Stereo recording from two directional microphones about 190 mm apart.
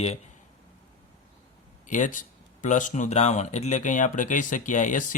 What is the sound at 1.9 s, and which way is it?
Speech, 40° left (ahead or behind).